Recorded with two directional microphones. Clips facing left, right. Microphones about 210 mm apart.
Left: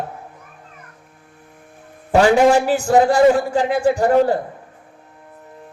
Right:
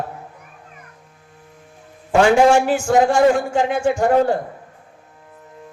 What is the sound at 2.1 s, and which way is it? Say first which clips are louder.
A man's voice: even; 35° left (ahead or behind).